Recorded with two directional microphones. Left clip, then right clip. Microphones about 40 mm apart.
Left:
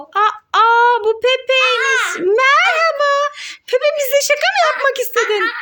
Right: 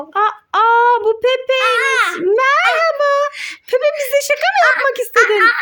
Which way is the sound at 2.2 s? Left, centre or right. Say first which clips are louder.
Left 2 dB; right.